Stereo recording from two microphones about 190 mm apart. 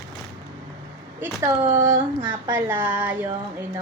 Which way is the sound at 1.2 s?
15° right (ahead or behind).